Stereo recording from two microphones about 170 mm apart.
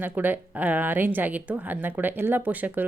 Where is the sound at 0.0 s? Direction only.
10° right (ahead or behind).